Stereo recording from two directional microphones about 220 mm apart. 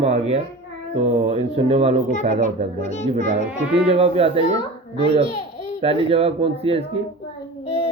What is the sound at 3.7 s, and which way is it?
Speech, 25° right (ahead or behind).